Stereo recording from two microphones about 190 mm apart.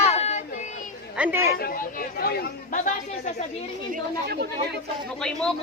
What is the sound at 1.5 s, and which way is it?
Speech, 50° left (ahead or behind).